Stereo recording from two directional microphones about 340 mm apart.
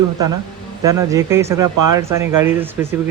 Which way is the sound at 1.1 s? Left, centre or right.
Centre.